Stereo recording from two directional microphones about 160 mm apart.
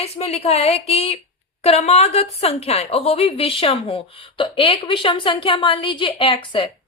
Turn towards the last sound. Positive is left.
turn(degrees=30)  # may be behind; listen again after turning